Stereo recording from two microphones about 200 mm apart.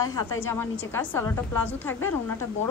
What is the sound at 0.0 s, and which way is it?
A woman's voice, 15° left (ahead or behind).